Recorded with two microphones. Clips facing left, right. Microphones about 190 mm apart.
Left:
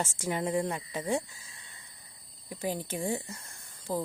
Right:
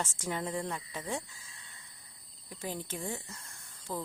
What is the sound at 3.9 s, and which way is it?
Speech, 35° left (ahead or behind).